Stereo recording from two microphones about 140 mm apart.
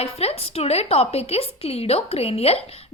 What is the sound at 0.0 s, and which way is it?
A woman's voice, 45° left (ahead or behind).